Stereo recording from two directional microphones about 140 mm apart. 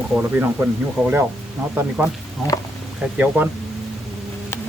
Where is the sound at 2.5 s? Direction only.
25° left (ahead or behind).